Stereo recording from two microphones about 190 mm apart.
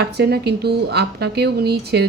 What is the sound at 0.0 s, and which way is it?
A woman's voice, 60° right (ahead or behind).